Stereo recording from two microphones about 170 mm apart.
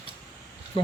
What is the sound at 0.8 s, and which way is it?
Speech, 30° left (ahead or behind).